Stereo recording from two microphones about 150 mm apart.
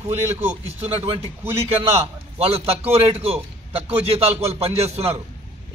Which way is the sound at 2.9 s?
40° right (ahead or behind).